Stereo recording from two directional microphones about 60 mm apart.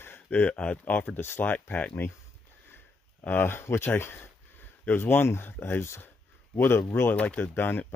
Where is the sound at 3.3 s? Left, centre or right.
Left.